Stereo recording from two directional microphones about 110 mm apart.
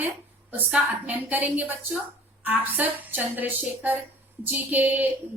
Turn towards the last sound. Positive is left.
turn(degrees=-15)  # may be behind; listen again after turning